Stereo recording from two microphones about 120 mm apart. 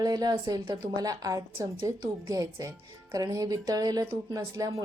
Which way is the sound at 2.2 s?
30° right (ahead or behind).